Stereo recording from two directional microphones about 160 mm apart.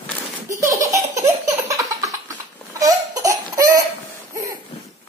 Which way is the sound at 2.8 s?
20° right (ahead or behind).